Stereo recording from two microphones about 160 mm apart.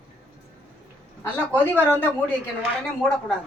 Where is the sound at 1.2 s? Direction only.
10° left (ahead or behind).